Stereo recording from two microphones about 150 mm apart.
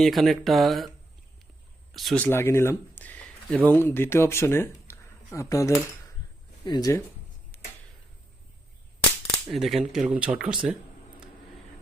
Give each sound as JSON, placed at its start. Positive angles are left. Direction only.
{"t": 0.0, "sound": "speech", "side_deg": 0}
{"t": 1.9, "sound": "speech", "side_deg": 0}
{"t": 2.2, "sound": "speech", "side_deg": 15}
{"t": 7.5, "sound": "a sound", "side_deg": 15}
{"t": 9.5, "sound": "speech", "side_deg": 0}